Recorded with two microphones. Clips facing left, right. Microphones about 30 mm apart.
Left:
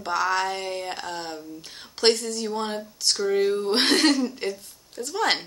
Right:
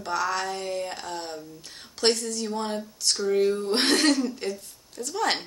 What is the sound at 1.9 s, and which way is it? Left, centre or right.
Speech, left.